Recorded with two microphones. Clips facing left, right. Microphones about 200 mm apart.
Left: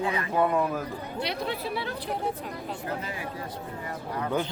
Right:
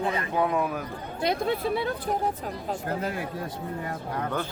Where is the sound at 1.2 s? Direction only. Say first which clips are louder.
Right 6 dB; 50° right (ahead or behind).